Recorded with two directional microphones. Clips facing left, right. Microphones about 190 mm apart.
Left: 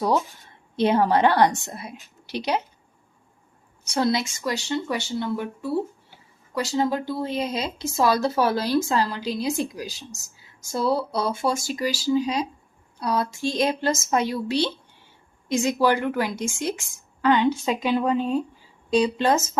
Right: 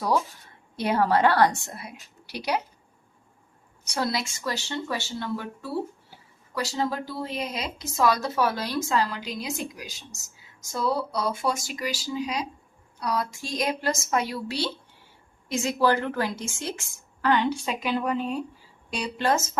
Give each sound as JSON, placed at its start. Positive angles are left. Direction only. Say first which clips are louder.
{"t": 0.8, "sound": "speech", "louder": "left 3 dB", "side_deg": 20}
{"t": 3.8, "sound": "speech", "louder": "left 5 dB", "side_deg": 25}